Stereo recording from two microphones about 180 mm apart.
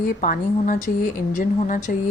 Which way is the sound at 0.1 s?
45° left (ahead or behind).